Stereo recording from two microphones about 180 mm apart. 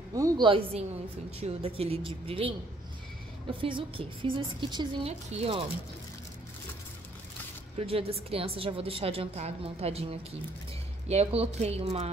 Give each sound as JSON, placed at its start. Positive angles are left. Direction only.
{"t": 0.1, "sound": "a woman's voice", "side_deg": -20}
{"t": 3.6, "sound": "a woman's voice", "side_deg": -30}
{"t": 7.7, "sound": "a woman's voice", "side_deg": -35}
{"t": 11.1, "sound": "a woman's voice", "side_deg": -35}